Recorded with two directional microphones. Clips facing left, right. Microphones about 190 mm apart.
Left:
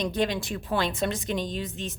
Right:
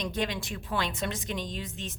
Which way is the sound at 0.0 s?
35° left (ahead or behind).